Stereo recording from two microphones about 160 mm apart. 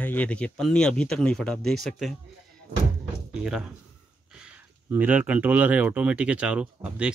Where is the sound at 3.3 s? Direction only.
5° right (ahead or behind).